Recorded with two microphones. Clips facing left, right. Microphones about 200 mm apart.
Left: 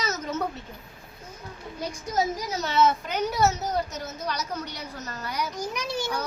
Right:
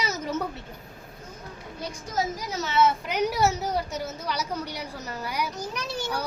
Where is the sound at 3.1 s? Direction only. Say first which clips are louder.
Even; 10° right (ahead or behind).